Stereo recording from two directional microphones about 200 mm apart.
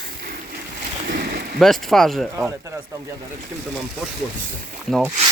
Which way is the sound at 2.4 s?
15° right (ahead or behind).